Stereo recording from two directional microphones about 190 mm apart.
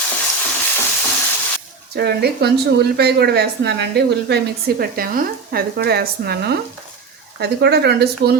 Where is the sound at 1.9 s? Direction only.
60° right (ahead or behind).